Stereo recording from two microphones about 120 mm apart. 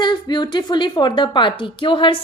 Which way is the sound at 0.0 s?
40° left (ahead or behind).